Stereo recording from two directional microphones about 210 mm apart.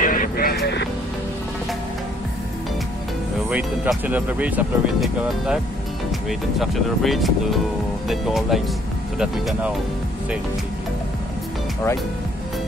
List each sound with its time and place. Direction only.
0.0 s music: 40° left (ahead or behind)
3.4 s speech: 5° right (ahead or behind)